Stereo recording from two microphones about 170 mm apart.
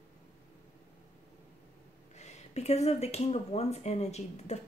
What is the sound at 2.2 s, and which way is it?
Speech, 40° left (ahead or behind).